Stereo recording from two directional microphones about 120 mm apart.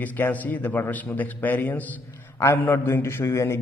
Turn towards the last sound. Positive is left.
turn(degrees=20)  # may be behind; listen again after turning